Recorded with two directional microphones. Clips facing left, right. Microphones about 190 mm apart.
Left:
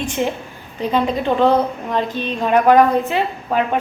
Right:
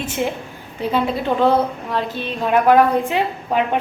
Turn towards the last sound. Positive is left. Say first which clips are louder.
# even
turn(degrees=-15)  # may be behind; listen again after turning